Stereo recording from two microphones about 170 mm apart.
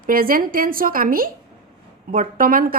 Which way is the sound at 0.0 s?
55° right (ahead or behind).